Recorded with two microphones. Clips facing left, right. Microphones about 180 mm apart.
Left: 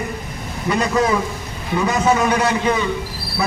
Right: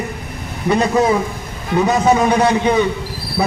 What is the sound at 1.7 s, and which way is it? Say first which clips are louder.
A man's voice: right 3 dB; 25° right (ahead or behind).